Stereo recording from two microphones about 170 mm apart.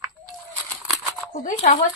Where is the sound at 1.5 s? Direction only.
45° left (ahead or behind).